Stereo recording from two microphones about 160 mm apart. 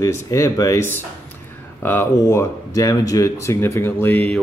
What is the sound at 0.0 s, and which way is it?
Speech, 20° left (ahead or behind).